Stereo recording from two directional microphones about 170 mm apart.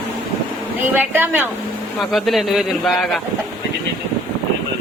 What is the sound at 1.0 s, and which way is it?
Speech, 10° right (ahead or behind).